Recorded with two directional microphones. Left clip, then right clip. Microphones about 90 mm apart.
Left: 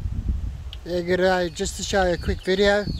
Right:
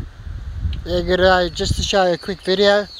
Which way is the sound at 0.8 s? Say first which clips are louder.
Right 6 dB; centre (ahead or behind).